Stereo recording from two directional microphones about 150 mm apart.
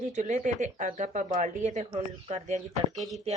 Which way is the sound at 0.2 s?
55° right (ahead or behind).